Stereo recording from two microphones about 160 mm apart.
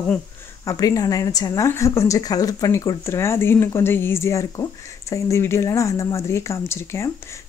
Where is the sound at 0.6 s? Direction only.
20° left (ahead or behind).